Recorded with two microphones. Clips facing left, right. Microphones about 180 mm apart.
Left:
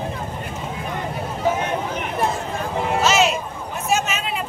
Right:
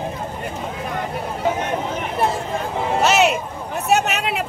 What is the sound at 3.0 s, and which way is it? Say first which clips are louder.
Music: right 3 dB; 60° right (ahead or behind).